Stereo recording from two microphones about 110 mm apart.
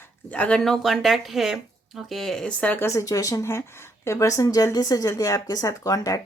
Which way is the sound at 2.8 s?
30° left (ahead or behind).